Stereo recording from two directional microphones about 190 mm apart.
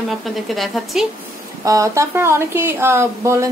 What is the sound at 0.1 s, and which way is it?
Speech, centre (ahead or behind).